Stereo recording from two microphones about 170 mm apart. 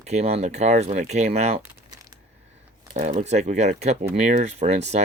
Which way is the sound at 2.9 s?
50° right (ahead or behind).